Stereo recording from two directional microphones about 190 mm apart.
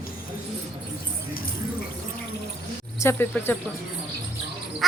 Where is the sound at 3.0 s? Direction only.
10° left (ahead or behind).